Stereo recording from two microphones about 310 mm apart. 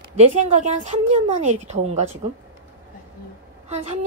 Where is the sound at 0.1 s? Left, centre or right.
Right.